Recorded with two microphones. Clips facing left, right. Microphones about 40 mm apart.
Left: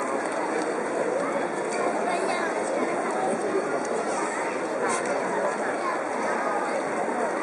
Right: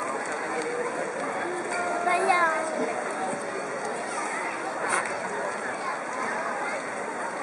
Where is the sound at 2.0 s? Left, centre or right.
Centre.